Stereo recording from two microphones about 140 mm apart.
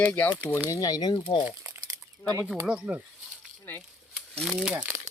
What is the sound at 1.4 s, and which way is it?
Crumpling, 15° right (ahead or behind).